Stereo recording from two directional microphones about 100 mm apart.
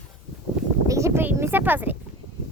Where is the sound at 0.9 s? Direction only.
30° right (ahead or behind).